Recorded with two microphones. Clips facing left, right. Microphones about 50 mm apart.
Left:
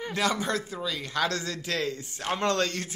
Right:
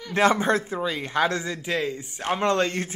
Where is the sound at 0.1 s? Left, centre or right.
Right.